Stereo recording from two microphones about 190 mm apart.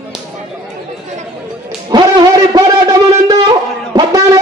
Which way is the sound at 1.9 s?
20° right (ahead or behind).